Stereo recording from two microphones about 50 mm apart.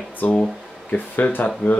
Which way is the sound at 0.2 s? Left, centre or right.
Left.